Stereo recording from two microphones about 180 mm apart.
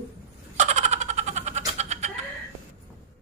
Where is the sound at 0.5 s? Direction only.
40° right (ahead or behind).